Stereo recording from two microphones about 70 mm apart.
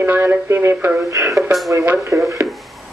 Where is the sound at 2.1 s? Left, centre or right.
Right.